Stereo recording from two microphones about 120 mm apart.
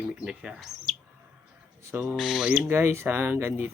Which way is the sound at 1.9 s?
20° right (ahead or behind).